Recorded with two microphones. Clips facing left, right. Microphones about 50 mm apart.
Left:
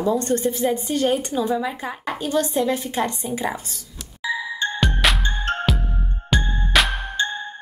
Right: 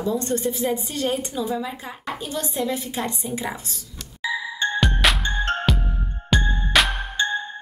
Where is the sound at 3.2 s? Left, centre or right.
Centre.